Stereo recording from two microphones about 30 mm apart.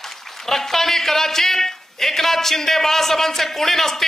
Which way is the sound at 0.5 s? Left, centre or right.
Centre.